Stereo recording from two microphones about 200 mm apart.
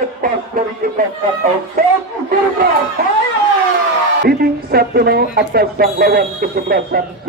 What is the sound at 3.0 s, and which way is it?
Speech, 50° right (ahead or behind).